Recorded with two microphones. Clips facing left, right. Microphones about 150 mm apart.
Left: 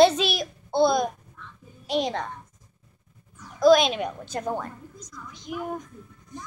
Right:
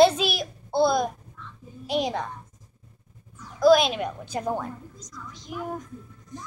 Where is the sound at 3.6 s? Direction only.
5° right (ahead or behind).